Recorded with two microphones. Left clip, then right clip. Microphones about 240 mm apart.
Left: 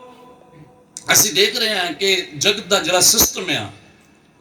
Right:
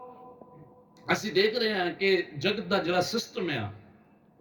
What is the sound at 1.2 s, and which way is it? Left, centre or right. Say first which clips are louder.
A man's voice: left 9 dB; centre.